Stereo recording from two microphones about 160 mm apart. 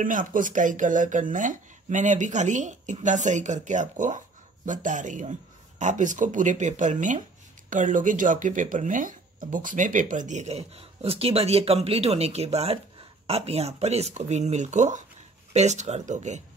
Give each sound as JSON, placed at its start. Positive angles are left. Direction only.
{"t": 0.0, "sound": "speech", "side_deg": -55}